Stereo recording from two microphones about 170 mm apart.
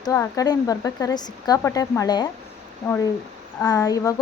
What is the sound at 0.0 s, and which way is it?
A woman's voice, 20° left (ahead or behind).